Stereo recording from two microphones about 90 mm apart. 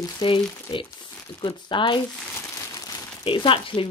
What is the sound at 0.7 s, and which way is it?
Speech, 65° left (ahead or behind).